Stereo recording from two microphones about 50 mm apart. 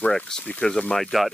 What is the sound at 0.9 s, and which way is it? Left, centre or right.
Speech, centre.